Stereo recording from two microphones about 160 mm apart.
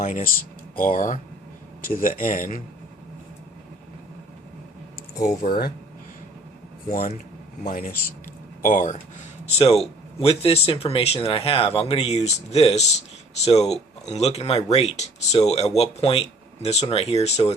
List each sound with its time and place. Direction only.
0.0 s speech: 55° left (ahead or behind)
5.2 s speech: 45° left (ahead or behind)
6.8 s speech: 60° left (ahead or behind)
9.6 s speech: 40° left (ahead or behind)